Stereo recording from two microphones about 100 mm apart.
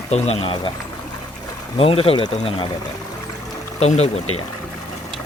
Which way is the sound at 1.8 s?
70° left (ahead or behind).